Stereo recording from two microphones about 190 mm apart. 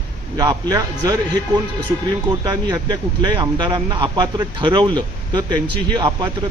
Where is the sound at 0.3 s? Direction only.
20° right (ahead or behind).